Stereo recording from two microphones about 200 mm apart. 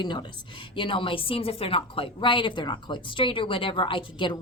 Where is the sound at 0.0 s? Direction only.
25° left (ahead or behind).